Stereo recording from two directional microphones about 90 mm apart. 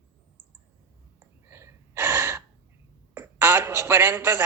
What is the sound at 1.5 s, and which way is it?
Gasp, 30° right (ahead or behind).